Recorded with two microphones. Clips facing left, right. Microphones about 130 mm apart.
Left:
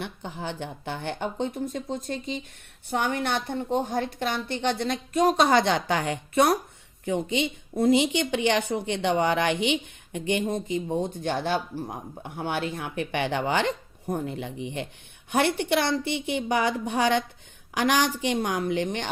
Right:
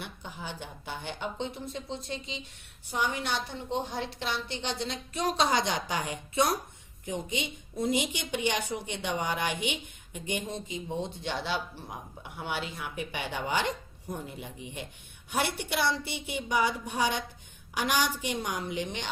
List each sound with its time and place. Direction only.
0.0 s a woman's voice: 60° left (ahead or behind)
10.5 s a woman's voice: 50° left (ahead or behind)